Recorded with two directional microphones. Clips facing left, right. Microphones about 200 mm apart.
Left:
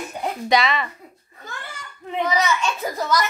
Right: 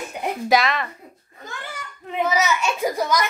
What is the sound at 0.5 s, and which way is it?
Speech, centre (ahead or behind).